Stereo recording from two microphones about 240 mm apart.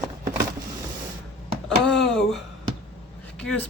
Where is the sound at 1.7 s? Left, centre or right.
Centre.